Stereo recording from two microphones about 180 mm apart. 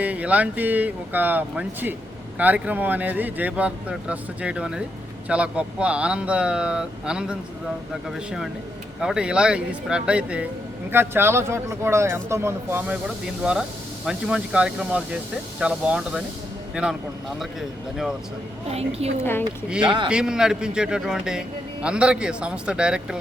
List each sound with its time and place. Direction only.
0.0 s speech: 10° right (ahead or behind)
19.2 s speech: 10° left (ahead or behind)
19.8 s speech: 25° right (ahead or behind)
20.1 s speech: 5° right (ahead or behind)